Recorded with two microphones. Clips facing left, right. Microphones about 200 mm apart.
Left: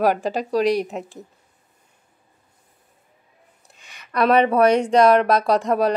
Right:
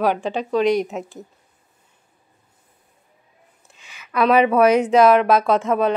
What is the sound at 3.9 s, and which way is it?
Speech, 5° right (ahead or behind).